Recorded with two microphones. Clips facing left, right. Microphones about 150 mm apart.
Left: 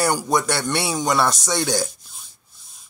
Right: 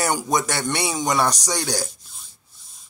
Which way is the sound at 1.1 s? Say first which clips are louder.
Left 2 dB; 15° right (ahead or behind).